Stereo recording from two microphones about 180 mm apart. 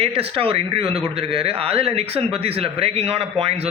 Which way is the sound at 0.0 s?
30° right (ahead or behind).